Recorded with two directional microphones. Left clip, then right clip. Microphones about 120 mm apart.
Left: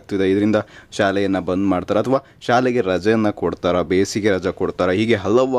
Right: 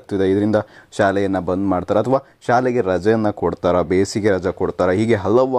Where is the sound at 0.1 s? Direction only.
15° left (ahead or behind).